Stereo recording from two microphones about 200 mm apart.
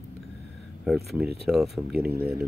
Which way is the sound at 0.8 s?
Centre (ahead or behind).